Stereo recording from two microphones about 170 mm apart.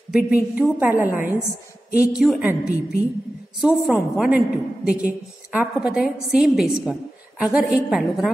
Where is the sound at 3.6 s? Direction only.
5° right (ahead or behind).